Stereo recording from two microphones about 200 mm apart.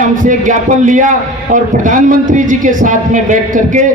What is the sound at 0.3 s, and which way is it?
A man's voice, 40° right (ahead or behind).